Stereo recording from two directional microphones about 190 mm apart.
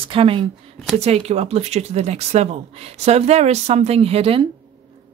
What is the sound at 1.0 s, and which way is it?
Speech, 35° right (ahead or behind).